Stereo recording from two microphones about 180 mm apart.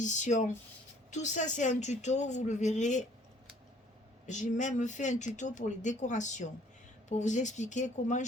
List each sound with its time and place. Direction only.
0.0 s a woman's voice: 40° left (ahead or behind)
4.3 s a woman's voice: 40° left (ahead or behind)